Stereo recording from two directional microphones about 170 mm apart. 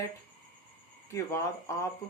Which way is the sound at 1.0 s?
15° left (ahead or behind).